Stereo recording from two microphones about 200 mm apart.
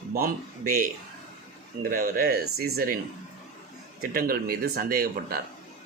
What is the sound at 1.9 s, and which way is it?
A man's voice, 45° right (ahead or behind).